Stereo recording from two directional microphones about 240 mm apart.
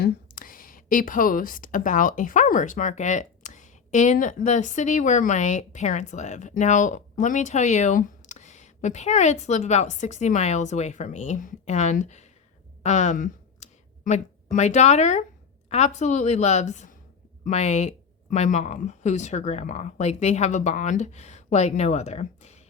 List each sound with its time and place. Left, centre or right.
0.0 s a woman's voice: left
12.8 s a sound: left
14.5 s speech: left